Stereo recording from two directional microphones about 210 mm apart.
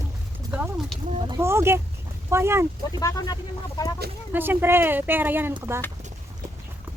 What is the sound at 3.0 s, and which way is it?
Speech, 15° left (ahead or behind).